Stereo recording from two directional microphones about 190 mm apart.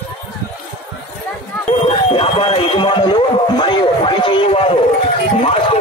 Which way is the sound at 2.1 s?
30° left (ahead or behind).